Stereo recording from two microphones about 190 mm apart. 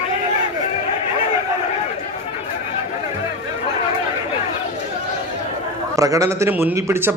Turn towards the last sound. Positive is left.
turn(degrees=-15)  # may be behind; listen again after turning